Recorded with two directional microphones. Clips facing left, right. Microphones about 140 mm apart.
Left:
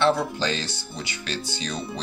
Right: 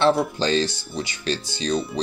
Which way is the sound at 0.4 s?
30° right (ahead or behind).